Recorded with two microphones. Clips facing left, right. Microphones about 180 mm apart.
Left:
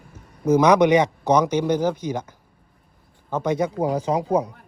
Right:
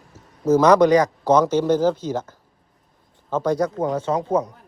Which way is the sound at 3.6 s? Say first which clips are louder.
Even; 10° left (ahead or behind).